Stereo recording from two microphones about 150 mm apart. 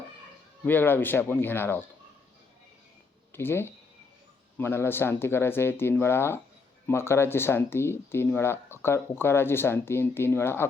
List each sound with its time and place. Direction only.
0.6 s speech: 10° left (ahead or behind)
3.3 s speech: 15° left (ahead or behind)